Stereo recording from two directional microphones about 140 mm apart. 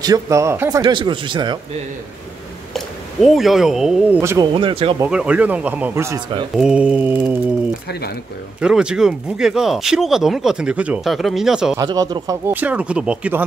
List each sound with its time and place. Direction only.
0.0 s speech: 25° right (ahead or behind)
0.8 s speech: 35° right (ahead or behind)
2.7 s speech: centre (ahead or behind)
4.2 s speech: 20° right (ahead or behind)
4.5 s speech: 35° right (ahead or behind)
5.1 s speech: 10° right (ahead or behind)
6.5 s speech: 5° right (ahead or behind)
8.5 s speech: 5° right (ahead or behind)
11.7 s speech: 25° right (ahead or behind)
12.4 s speech: 10° right (ahead or behind)